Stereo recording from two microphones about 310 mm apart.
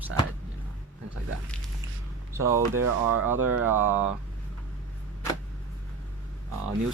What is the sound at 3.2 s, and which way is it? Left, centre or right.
Speech, centre.